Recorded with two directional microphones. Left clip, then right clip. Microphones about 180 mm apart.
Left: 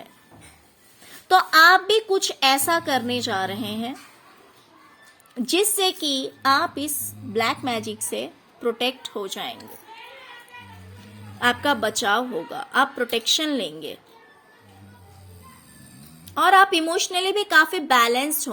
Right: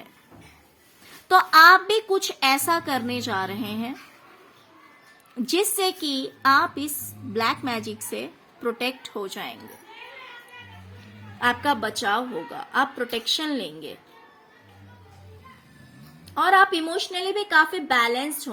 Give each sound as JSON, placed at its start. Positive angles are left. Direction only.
{"t": 1.3, "sound": "a woman's voice", "side_deg": 10}
{"t": 5.4, "sound": "a woman's voice", "side_deg": 10}
{"t": 11.3, "sound": "a woman's voice", "side_deg": 25}
{"t": 16.2, "sound": "a woman's voice", "side_deg": 30}